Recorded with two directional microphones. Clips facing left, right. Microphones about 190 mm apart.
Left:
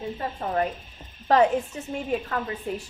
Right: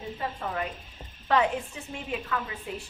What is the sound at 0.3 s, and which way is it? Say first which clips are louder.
Speech: left 6 dB; 40° left (ahead or behind).